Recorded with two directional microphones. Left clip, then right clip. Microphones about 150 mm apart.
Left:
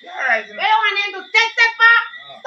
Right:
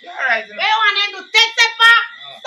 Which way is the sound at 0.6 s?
20° right (ahead or behind).